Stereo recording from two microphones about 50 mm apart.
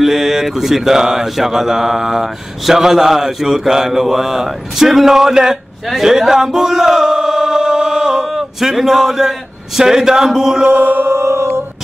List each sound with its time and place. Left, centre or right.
0.0 s mantra: centre
5.9 s chant: centre
8.3 s a man's voice: centre
10.6 s music: right
11.1 s music: right